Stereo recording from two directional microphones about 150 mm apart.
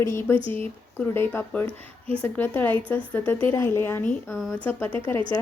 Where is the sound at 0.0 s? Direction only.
15° left (ahead or behind).